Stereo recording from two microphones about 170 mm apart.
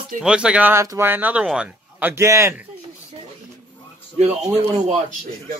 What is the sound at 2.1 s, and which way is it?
Speech, 15° right (ahead or behind).